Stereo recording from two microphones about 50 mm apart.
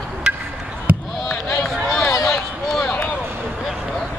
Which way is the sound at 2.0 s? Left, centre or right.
Centre.